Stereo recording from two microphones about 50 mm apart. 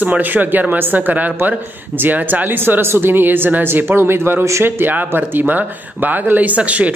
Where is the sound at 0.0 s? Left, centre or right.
Right.